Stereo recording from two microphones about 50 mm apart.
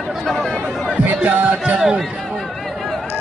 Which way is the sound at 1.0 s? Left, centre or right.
Right.